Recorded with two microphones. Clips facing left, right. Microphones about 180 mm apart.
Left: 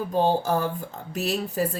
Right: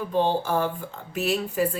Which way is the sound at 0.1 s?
40° left (ahead or behind).